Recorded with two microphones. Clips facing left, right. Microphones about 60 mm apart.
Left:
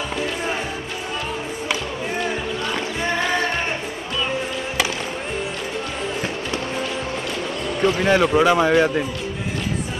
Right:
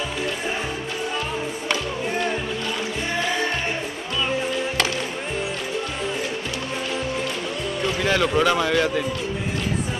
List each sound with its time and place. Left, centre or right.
8.0 s speech: left